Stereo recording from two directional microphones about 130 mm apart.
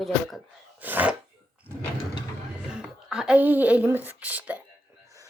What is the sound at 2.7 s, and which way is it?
Speech, 5° right (ahead or behind).